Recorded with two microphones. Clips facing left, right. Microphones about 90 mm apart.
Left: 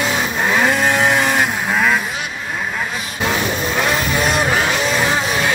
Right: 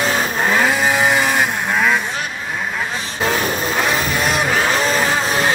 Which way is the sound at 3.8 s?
Centre (ahead or behind).